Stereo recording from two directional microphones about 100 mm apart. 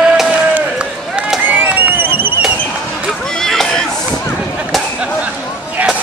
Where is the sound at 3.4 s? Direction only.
5° left (ahead or behind).